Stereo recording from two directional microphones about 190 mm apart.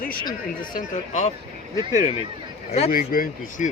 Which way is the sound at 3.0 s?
50° left (ahead or behind).